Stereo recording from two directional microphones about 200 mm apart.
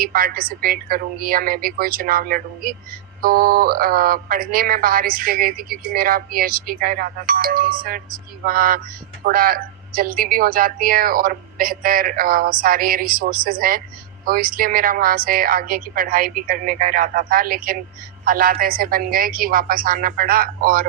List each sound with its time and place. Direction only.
0.0 s speech: 45° right (ahead or behind)